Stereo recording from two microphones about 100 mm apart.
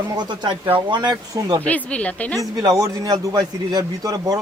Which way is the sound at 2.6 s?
35° right (ahead or behind).